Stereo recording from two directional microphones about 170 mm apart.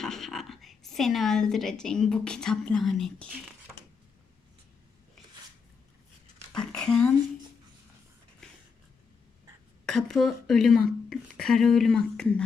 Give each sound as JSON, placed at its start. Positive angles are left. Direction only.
{"t": 0.0, "sound": "a woman's voice", "side_deg": 0}
{"t": 6.5, "sound": "a sound", "side_deg": 5}
{"t": 9.8, "sound": "speech", "side_deg": 0}